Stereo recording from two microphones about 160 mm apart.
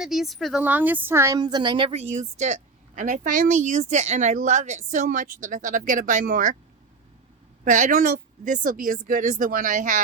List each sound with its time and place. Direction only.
0.0 s speech: centre (ahead or behind)
0.6 s a woman's voice: 10° right (ahead or behind); by 6.6 s 55° right (ahead or behind)
7.6 s speech: 55° right (ahead or behind)